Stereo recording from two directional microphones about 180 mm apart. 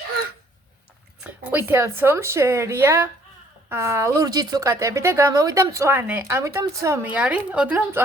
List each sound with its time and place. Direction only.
1.2 s speech: 10° right (ahead or behind)